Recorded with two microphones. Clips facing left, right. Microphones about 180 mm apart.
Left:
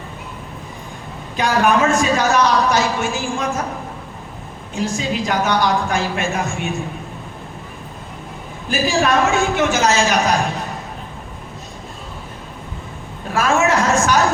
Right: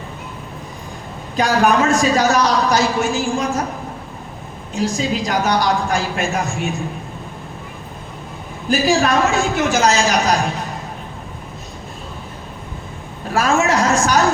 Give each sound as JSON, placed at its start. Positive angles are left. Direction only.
{"t": 1.4, "sound": "a man's voice", "side_deg": -40}
{"t": 4.7, "sound": "a man's voice", "side_deg": -35}
{"t": 8.7, "sound": "a man's voice", "side_deg": -35}
{"t": 13.3, "sound": "a man's voice", "side_deg": -35}